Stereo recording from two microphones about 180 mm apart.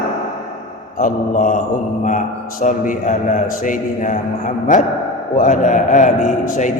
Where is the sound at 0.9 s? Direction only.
45° left (ahead or behind).